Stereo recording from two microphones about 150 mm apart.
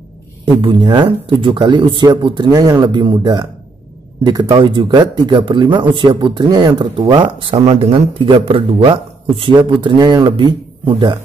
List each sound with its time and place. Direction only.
0.6 s speech: 30° right (ahead or behind)